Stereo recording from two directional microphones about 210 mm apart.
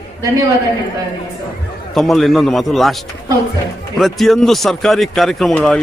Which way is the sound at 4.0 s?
Centre (ahead or behind).